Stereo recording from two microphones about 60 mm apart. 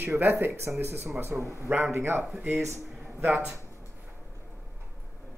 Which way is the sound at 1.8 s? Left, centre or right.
Right.